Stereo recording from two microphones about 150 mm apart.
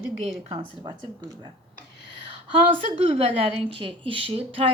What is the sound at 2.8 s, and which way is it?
A woman's voice, 40° right (ahead or behind).